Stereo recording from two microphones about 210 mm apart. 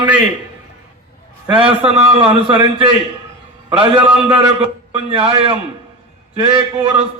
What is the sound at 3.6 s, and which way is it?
A man's voice, 25° right (ahead or behind).